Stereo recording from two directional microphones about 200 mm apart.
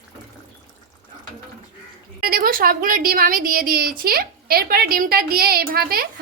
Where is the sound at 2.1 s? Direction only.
50° right (ahead or behind).